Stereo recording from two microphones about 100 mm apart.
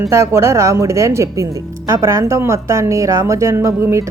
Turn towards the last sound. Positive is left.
turn(degrees=-30)  # may be behind; listen again after turning